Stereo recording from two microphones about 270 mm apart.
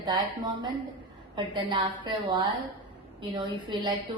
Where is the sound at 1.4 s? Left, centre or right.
Centre.